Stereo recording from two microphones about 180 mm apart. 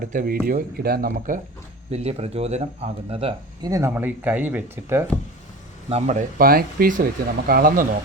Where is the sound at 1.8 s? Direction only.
35° right (ahead or behind).